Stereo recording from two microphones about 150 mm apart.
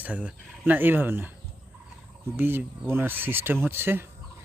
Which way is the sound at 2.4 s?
15° right (ahead or behind).